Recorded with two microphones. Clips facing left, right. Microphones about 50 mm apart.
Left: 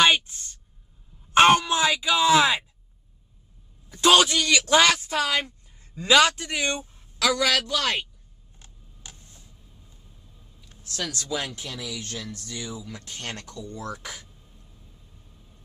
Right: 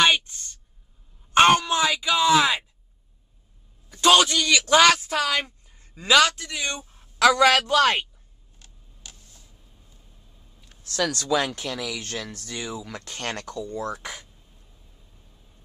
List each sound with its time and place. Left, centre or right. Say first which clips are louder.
0.0 s a sound: even; centre
1.3 s speech: even; centre
3.9 s a sound: right 1 dB; centre
4.2 s speech: even; centre
6.2 s speech: left 1 dB; left
7.2 s a woman's voice: right 6 dB; right
8.5 s camera: left 1 dB; left
11.1 s speech: right 6 dB; right
12.0 s speech: right 2 dB; right
12.8 s speech: right 4 dB; right
13.7 s speech: right 1 dB; right